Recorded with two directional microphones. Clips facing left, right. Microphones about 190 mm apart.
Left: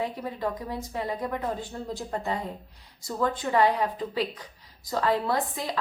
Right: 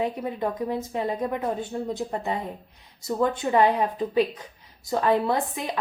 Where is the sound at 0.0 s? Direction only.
20° right (ahead or behind).